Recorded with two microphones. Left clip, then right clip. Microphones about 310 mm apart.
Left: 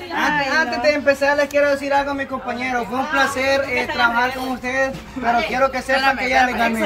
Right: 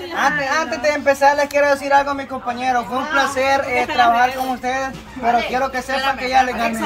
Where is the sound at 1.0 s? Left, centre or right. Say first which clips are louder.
Right 2 dB; centre.